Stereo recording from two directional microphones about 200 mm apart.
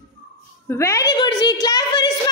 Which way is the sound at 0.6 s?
15° left (ahead or behind).